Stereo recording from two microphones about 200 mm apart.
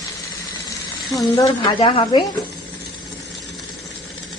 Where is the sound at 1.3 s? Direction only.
20° left (ahead or behind).